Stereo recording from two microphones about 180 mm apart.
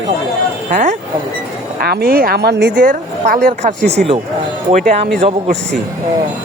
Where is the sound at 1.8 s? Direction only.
60° right (ahead or behind).